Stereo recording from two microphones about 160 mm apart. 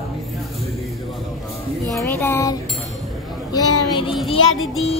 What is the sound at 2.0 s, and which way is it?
Music, 15° left (ahead or behind).